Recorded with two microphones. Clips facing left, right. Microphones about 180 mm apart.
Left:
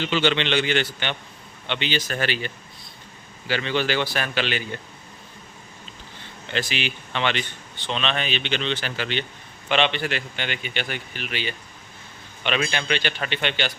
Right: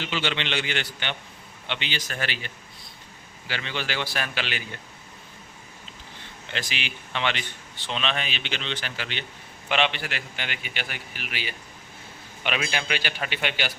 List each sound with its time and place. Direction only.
0.0 s a man's voice: 5° right (ahead or behind)
0.8 s speech: 30° left (ahead or behind)
1.6 s speech: 5° right (ahead or behind)
1.9 s speech: 30° left (ahead or behind)
3.5 s speech: 35° left (ahead or behind)
3.9 s a man's voice: centre (ahead or behind)
6.7 s a man's voice: 5° right (ahead or behind)
8.6 s speech: 30° left (ahead or behind)
9.0 s a man's voice: 5° right (ahead or behind)